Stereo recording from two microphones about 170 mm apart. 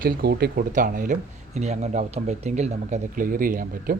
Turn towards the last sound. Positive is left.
turn(degrees=-55)  # may be behind; listen again after turning